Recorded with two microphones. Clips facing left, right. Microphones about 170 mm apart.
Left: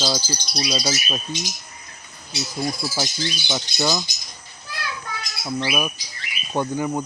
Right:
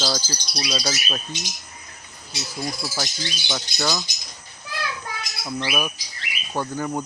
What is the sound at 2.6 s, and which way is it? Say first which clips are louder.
Speech: left 3 dB; 15° left (ahead or behind).